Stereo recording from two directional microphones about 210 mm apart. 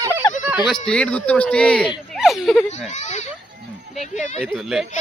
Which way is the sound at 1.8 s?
5° right (ahead or behind).